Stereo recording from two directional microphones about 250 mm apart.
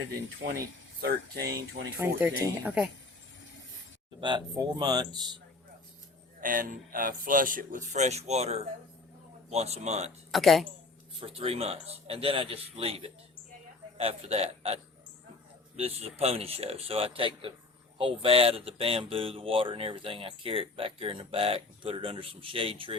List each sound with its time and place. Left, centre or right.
1.4 s speech: centre
4.2 s speech: centre
6.4 s speech: right
10.3 s a woman's voice: centre
11.2 s speech: right